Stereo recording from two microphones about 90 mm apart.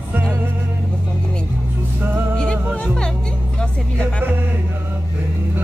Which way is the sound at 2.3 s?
10° left (ahead or behind).